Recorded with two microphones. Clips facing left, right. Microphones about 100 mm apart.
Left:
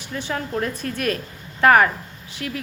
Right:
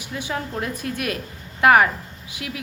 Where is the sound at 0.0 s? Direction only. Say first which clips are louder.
Left 1 dB; 10° right (ahead or behind).